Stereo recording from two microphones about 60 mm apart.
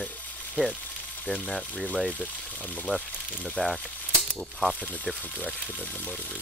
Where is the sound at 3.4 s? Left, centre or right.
Centre.